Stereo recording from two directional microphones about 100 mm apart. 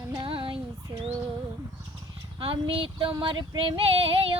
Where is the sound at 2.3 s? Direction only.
65° right (ahead or behind).